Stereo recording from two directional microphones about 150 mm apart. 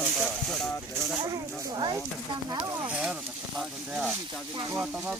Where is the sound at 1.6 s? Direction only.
30° right (ahead or behind).